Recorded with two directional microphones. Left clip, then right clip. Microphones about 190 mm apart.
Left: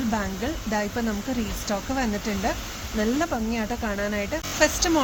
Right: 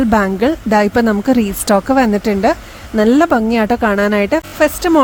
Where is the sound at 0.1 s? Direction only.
65° right (ahead or behind).